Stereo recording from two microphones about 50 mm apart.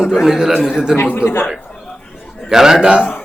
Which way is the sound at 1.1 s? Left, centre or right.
Left.